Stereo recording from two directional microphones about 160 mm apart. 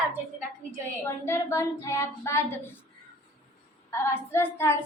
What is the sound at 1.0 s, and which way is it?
A woman's voice, 15° left (ahead or behind).